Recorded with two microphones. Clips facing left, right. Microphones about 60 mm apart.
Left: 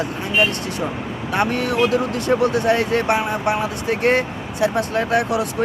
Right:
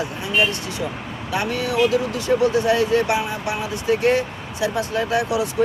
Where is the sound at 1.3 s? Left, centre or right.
Left.